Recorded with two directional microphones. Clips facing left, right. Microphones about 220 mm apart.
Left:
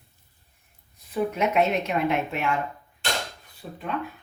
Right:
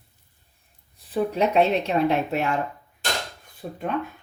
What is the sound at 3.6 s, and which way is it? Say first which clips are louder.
Speech: right 4 dB; 55° right (ahead or behind).